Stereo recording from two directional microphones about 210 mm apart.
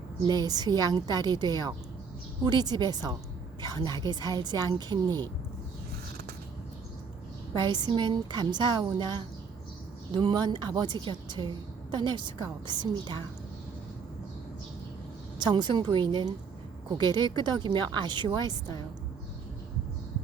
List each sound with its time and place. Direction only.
0.3 s a woman's voice: 20° right (ahead or behind)
7.5 s a woman's voice: 20° right (ahead or behind)
15.4 s a woman's voice: 20° right (ahead or behind)